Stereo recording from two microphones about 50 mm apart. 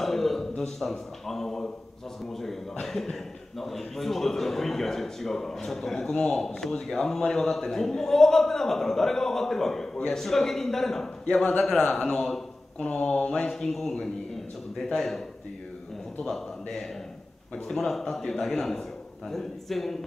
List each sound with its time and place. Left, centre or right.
0.0 s a man's voice: centre
11.8 s a man's voice: centre
13.5 s a man's voice: centre
15.0 s a man's voice: centre
17.6 s a man's voice: centre